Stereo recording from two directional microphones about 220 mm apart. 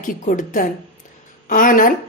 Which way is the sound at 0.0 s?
35° left (ahead or behind).